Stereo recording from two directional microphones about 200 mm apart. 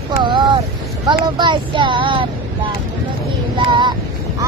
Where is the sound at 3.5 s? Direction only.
25° right (ahead or behind).